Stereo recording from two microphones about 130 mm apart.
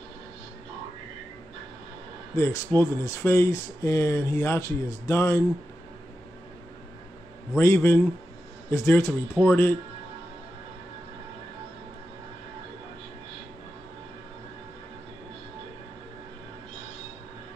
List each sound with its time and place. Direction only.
2.3 s speech: 20° left (ahead or behind)
7.5 s speech: 20° left (ahead or behind)